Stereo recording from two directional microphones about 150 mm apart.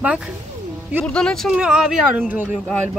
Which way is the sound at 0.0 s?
5° right (ahead or behind).